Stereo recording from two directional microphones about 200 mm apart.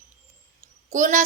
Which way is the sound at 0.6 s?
35° right (ahead or behind).